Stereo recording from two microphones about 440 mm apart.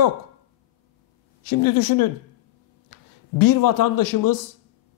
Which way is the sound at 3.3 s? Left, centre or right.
Left.